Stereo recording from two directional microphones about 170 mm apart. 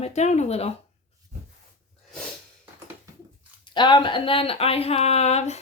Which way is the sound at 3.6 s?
25° left (ahead or behind).